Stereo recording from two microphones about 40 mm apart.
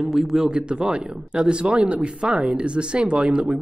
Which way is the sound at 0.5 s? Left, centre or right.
Right.